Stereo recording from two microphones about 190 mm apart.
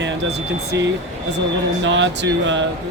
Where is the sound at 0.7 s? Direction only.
70° right (ahead or behind).